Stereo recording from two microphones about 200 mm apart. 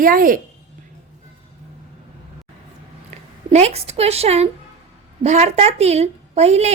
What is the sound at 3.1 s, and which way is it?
A woman's voice, 30° right (ahead or behind).